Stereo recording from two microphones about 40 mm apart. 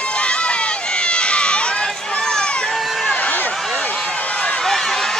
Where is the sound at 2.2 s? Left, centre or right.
Centre.